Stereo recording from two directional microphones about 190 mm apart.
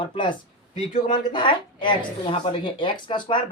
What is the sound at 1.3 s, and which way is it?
A man's voice, 25° left (ahead or behind).